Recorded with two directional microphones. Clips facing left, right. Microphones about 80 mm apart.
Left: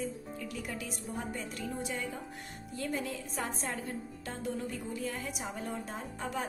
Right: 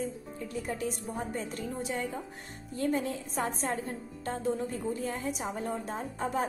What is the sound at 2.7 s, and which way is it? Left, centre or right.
Music, right.